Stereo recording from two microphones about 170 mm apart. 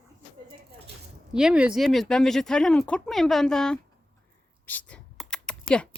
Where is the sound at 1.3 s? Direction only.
5° right (ahead or behind).